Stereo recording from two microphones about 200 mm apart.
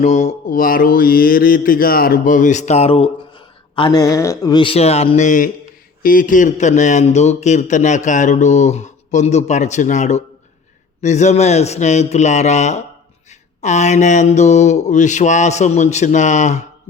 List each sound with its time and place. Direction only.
0.0 s mantra: 35° left (ahead or behind)